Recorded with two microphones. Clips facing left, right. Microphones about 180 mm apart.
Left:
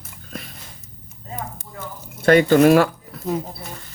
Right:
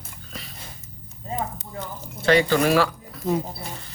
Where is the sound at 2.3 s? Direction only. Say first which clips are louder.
Left 6 dB; 50° left (ahead or behind).